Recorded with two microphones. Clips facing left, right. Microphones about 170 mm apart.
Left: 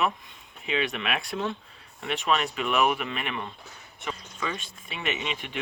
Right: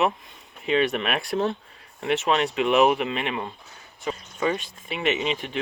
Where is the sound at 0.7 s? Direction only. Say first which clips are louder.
Right 6 dB; 40° right (ahead or behind).